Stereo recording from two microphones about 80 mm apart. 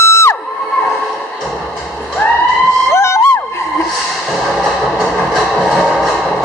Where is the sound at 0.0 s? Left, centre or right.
Left.